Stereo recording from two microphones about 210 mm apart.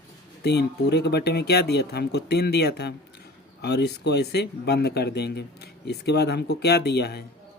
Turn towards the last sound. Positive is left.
turn(degrees=50)  # may be behind; listen again after turning